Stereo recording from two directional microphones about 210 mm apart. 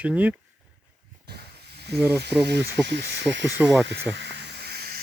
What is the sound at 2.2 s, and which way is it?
Speech, 55° right (ahead or behind).